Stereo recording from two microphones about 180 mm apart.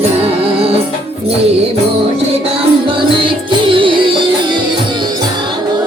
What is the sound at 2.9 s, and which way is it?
Music, 30° right (ahead or behind).